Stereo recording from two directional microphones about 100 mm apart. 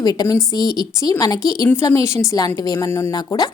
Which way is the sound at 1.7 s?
25° left (ahead or behind).